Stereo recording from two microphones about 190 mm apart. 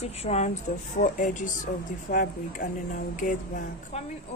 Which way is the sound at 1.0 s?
40° left (ahead or behind).